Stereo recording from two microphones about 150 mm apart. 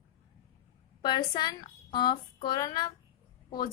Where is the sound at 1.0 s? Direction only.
30° left (ahead or behind).